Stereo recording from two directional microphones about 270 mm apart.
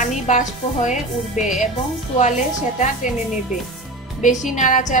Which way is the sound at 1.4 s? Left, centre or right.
Centre.